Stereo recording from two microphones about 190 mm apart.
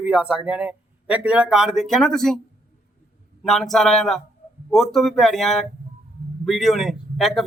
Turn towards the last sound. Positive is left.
turn(degrees=0)  # may be behind; listen again after turning